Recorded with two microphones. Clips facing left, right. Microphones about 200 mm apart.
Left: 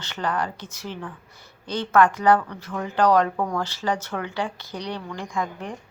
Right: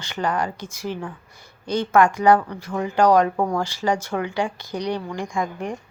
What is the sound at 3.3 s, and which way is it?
Speech, 25° right (ahead or behind).